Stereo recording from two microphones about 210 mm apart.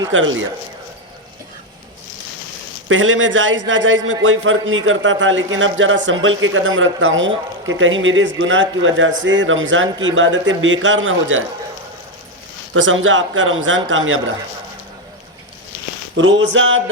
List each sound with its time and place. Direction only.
0.1 s a man's voice: 65° right (ahead or behind)
2.9 s a man's voice: 70° right (ahead or behind)
12.7 s a man's voice: 70° right (ahead or behind)
16.2 s a man's voice: 60° right (ahead or behind)